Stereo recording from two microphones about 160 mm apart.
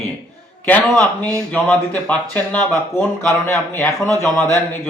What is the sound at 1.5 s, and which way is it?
Speech, 10° left (ahead or behind).